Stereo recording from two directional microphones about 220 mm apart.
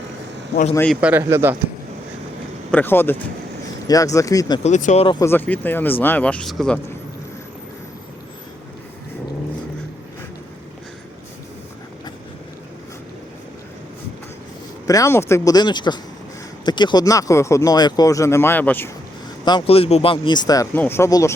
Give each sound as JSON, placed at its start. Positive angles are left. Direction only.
{"t": 0.7, "sound": "speech", "side_deg": 10}
{"t": 1.0, "sound": "speech", "side_deg": -10}
{"t": 2.7, "sound": "speech", "side_deg": 10}
{"t": 4.6, "sound": "speech", "side_deg": 30}
{"t": 5.2, "sound": "speech", "side_deg": 10}
{"t": 14.8, "sound": "speech", "side_deg": 15}
{"t": 19.5, "sound": "speech", "side_deg": 25}